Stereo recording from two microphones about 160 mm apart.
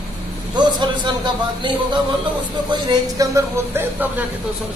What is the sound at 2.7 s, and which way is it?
Speech, 25° right (ahead or behind).